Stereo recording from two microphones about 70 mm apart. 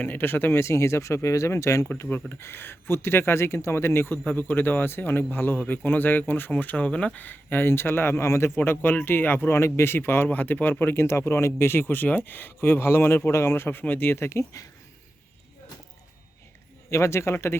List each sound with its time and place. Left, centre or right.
0.0 s speech: left
2.3 s speech: left
4.2 s a man's voice: left
14.2 s speech: left
16.9 s speech: left